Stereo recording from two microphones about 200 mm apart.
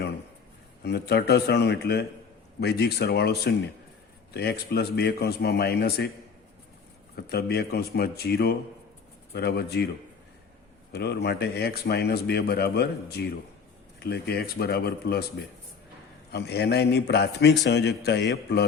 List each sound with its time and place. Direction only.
0.9 s speech: 55° left (ahead or behind)
7.2 s a man's voice: 50° left (ahead or behind)
10.9 s speech: 55° left (ahead or behind)
16.3 s a man's voice: 55° left (ahead or behind)